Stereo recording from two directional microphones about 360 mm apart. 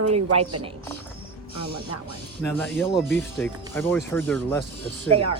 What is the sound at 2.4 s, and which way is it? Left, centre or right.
A woman's voice, centre.